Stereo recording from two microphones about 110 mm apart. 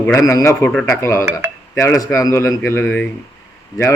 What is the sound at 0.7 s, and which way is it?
Speech, 5° left (ahead or behind).